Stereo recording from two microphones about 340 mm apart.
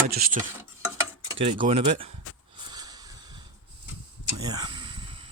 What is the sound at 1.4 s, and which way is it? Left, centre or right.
Speech, centre.